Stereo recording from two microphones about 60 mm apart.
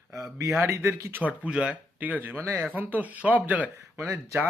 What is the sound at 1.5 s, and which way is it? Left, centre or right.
Speech, centre.